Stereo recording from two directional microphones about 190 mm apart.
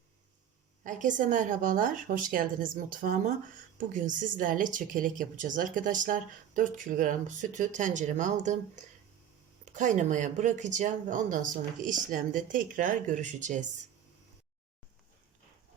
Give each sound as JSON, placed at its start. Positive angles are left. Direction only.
{"t": 0.9, "sound": "speech", "side_deg": -40}